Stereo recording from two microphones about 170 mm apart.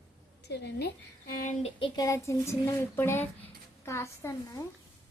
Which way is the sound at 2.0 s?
15° left (ahead or behind).